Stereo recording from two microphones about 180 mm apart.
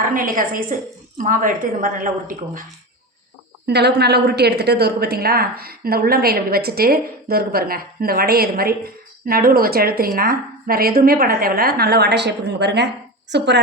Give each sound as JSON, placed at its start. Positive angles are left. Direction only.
{"t": 0.1, "sound": "a woman's voice", "side_deg": -50}
{"t": 3.7, "sound": "a woman's voice", "side_deg": -70}